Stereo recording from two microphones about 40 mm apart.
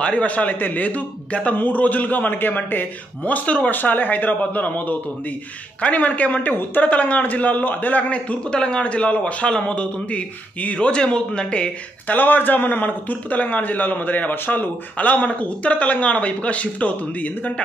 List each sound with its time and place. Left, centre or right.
0.0 s a man's voice: left
0.6 s a man's voice: left
3.7 s a man's voice: left
8.5 s a man's voice: left
8.8 s a man's voice: left
10.9 s a man's voice: left
12.1 s a man's voice: left